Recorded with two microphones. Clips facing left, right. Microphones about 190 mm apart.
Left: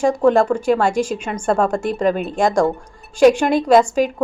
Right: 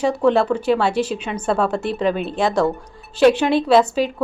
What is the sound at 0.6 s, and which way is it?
Speech, 45° left (ahead or behind).